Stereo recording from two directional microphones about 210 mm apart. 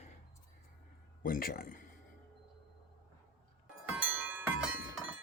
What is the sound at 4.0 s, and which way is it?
Wind chime, 5° right (ahead or behind).